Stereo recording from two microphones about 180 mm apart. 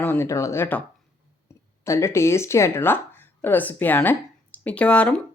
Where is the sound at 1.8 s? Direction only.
15° left (ahead or behind).